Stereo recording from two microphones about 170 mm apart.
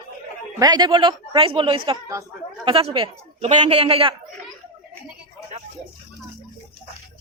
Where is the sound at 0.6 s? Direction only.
25° right (ahead or behind).